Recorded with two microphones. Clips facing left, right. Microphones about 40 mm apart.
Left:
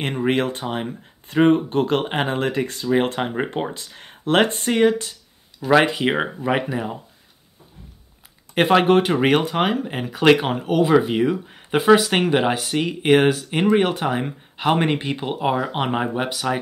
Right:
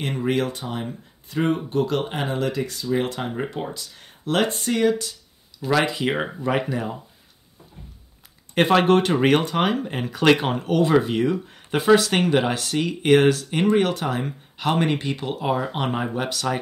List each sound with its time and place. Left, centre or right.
0.0 s speech: left; by 7.0 s centre
8.5 s speech: centre
13.7 s speech: left